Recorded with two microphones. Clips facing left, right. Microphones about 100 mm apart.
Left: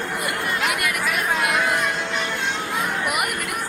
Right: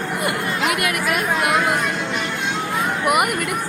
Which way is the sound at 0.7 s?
55° right (ahead or behind).